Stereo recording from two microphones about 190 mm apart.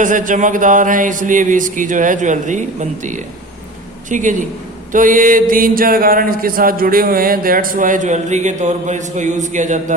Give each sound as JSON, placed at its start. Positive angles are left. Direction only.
{"t": 0.0, "sound": "mantra", "side_deg": -45}
{"t": 4.1, "sound": "a man's voice", "side_deg": -40}
{"t": 4.9, "sound": "mantra", "side_deg": -45}